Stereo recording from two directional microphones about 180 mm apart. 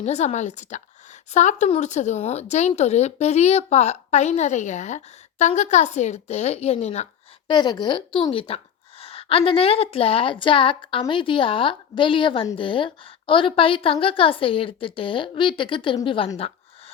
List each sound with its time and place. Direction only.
0.0 s speech: 40° left (ahead or behind)
7.4 s a woman's voice: 25° left (ahead or behind)